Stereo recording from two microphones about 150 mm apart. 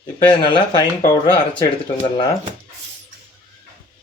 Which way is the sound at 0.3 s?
35° left (ahead or behind).